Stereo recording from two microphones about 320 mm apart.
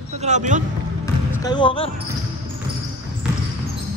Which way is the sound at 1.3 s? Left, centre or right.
Centre.